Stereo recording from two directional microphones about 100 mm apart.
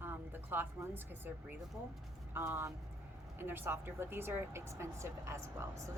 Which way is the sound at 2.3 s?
25° right (ahead or behind).